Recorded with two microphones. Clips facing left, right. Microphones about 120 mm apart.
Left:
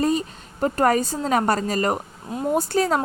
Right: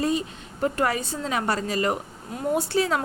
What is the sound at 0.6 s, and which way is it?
A woman's voice, 40° left (ahead or behind).